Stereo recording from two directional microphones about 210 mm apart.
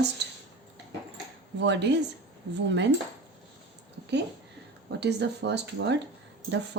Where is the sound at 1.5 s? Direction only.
55° right (ahead or behind).